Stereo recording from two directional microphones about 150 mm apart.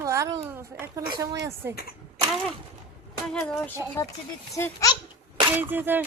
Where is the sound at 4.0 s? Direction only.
20° left (ahead or behind).